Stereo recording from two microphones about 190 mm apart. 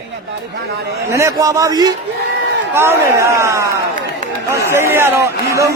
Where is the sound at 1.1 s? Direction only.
15° right (ahead or behind).